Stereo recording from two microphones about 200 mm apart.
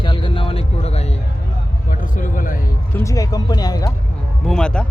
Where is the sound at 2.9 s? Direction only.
15° left (ahead or behind).